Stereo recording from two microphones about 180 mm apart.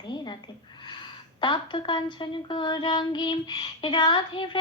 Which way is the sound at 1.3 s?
25° left (ahead or behind).